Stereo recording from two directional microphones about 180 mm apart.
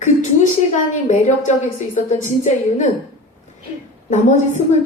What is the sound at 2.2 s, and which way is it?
Speech, 40° left (ahead or behind).